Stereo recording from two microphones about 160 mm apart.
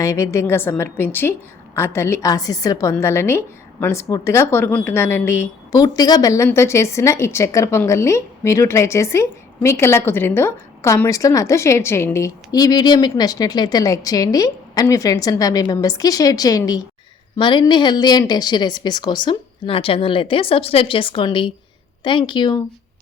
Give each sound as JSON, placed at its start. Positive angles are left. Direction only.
{"t": 0.0, "sound": "a woman's voice", "side_deg": 20}